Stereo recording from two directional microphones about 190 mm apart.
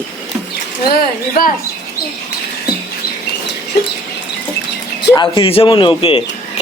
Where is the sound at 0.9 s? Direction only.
50° left (ahead or behind).